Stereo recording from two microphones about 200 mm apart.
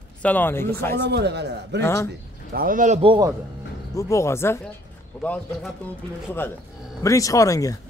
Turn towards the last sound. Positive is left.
turn(degrees=15)  # may be behind; listen again after turning